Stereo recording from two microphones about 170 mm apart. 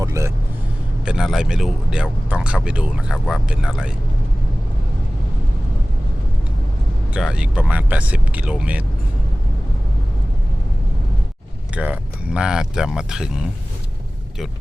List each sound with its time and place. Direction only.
0.0 s vehicle: 15° right (ahead or behind)
1.0 s speech: 5° right (ahead or behind)
7.1 s speech: 5° right (ahead or behind)
11.7 s speech: 5° right (ahead or behind)